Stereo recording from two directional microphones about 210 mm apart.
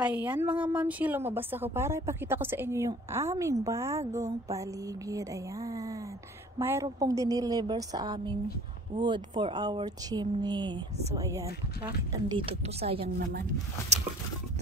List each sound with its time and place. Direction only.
0.0 s a woman's voice: 5° right (ahead or behind); by 11.1 s 25° right (ahead or behind)
11.3 s speech: 15° right (ahead or behind)